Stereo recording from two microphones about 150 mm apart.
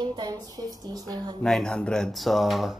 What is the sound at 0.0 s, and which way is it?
Speech, 30° right (ahead or behind).